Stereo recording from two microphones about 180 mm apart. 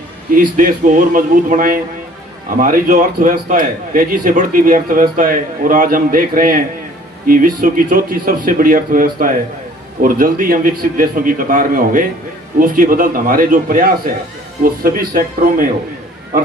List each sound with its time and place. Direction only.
0.3 s a man's voice: 50° right (ahead or behind)